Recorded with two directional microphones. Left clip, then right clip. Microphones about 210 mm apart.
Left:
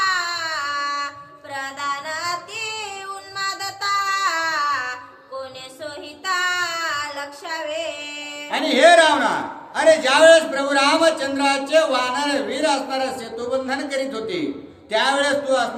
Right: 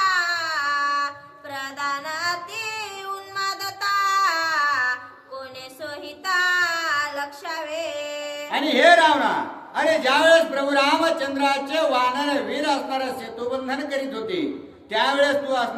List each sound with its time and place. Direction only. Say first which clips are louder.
0.0 s a sound: even; 15° right (ahead or behind)
1.5 s child singing: left 1 dB; 15° right (ahead or behind)
3.3 s music: left 1 dB; 15° right (ahead or behind)
5.4 s child singing: left 3 dB; 15° right (ahead or behind)
8.4 s a man's voice: left 2 dB; 10° left (ahead or behind)